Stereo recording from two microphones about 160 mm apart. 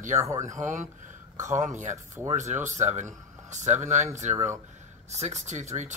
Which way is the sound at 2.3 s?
50° right (ahead or behind).